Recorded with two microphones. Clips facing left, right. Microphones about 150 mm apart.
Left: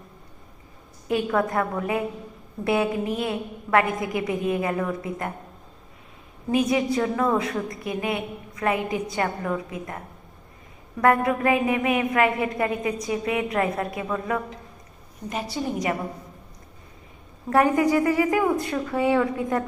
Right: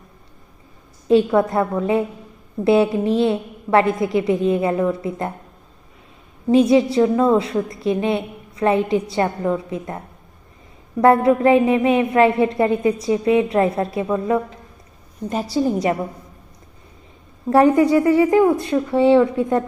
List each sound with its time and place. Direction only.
1.0 s a woman's voice: 25° right (ahead or behind)
2.6 s a woman's voice: 30° right (ahead or behind)
6.5 s a woman's voice: 30° right (ahead or behind)
11.0 s a woman's voice: 30° right (ahead or behind)
15.3 s a woman's voice: 35° right (ahead or behind)
17.5 s a woman's voice: 30° right (ahead or behind)